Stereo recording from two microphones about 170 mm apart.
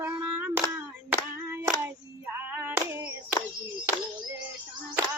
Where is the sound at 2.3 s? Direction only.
10° right (ahead or behind).